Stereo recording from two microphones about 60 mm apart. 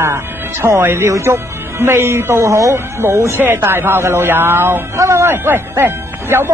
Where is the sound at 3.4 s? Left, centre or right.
Right.